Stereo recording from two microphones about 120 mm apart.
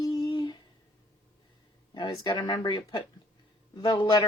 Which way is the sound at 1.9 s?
35° left (ahead or behind).